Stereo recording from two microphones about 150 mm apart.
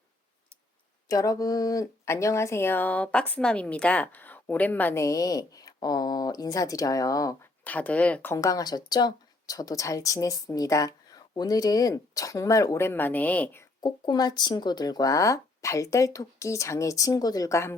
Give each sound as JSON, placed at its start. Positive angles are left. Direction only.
{"t": 1.0, "sound": "speech", "side_deg": 25}
{"t": 7.6, "sound": "speech", "side_deg": 10}
{"t": 13.8, "sound": "speech", "side_deg": 25}